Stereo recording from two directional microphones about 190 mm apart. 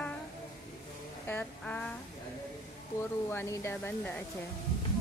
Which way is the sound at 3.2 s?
15° left (ahead or behind).